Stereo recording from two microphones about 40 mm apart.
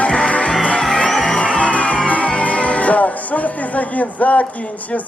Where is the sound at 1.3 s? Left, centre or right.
Left.